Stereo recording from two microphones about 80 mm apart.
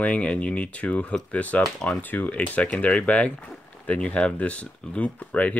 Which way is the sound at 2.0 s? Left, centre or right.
Left.